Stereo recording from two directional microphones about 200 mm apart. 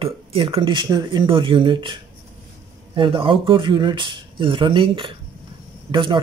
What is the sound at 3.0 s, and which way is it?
Speech, 25° right (ahead or behind).